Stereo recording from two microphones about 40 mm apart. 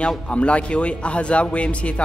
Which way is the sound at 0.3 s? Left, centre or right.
Left.